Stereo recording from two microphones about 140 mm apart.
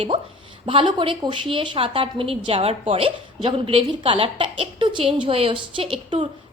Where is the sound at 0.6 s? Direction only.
35° right (ahead or behind).